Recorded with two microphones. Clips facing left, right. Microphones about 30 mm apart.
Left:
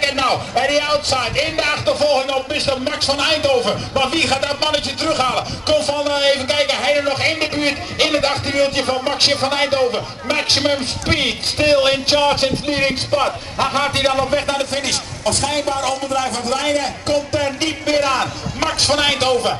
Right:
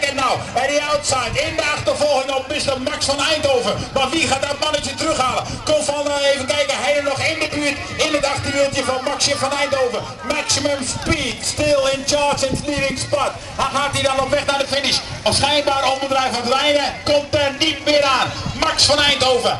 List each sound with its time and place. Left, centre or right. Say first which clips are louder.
0.0 s a man's voice: left 1 dB; left
14.1 s a man's voice: even; centre
14.7 s a man's voice: right 2 dB; right; by 19.5 s centre